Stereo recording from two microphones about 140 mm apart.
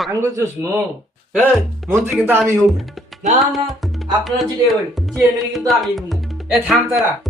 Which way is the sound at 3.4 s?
Centre (ahead or behind).